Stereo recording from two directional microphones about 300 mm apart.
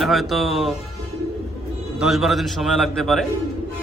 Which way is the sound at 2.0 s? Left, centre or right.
Centre.